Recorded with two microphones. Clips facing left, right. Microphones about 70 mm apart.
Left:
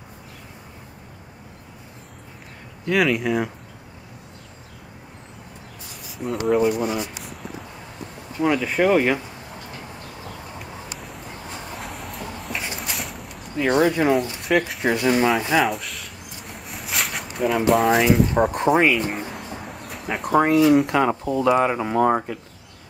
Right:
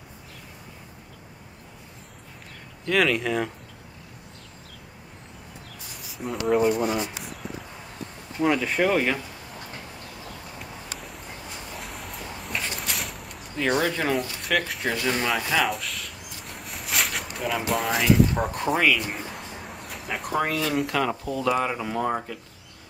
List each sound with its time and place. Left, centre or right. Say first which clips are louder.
2.8 s speech: left 2 dB; centre
6.0 s speech: left 3 dB; centre
6.8 s a sound: left 1 dB; centre
8.4 s speech: left 2 dB; centre
11.0 s a sound: left 3 dB; centre
13.6 s speech: left 6 dB; centre
14.4 s speech: left 5 dB; centre
15.6 s a sound: left 3 dB; centre
18.5 s speech: left 5 dB; left
19.0 s a sound: left 5 dB; centre
20.2 s speech: left 10 dB; left
21.5 s speech: left 6 dB; centre